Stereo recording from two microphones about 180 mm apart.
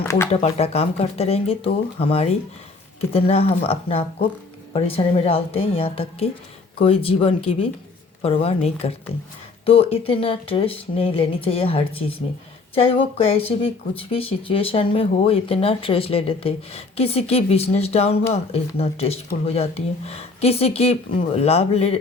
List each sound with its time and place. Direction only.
0.4 s speech: 35° left (ahead or behind)